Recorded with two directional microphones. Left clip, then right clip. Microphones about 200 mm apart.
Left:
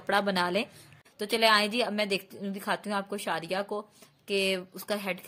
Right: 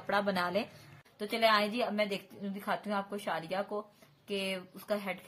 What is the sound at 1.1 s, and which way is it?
A woman's voice, 55° left (ahead or behind).